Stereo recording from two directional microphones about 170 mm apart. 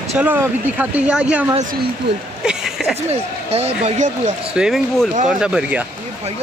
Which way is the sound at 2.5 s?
5° right (ahead or behind).